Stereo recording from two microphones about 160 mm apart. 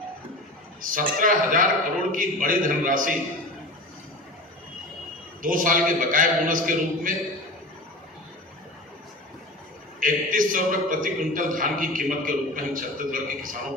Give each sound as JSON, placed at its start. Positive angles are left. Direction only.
{"t": 0.8, "sound": "a man's voice", "side_deg": -60}
{"t": 5.4, "sound": "a man's voice", "side_deg": -60}
{"t": 10.0, "sound": "a man's voice", "side_deg": -60}